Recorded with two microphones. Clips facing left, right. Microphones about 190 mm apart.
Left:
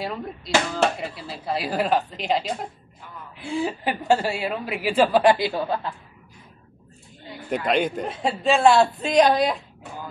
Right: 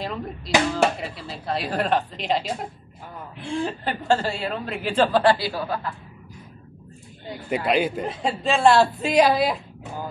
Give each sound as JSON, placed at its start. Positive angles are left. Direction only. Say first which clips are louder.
{"t": 0.0, "sound": "a man's voice", "louder": "even", "side_deg": 5}
{"t": 7.4, "sound": "a man's voice", "louder": "even", "side_deg": -5}